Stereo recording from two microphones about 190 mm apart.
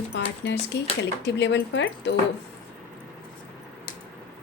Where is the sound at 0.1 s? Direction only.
70° left (ahead or behind).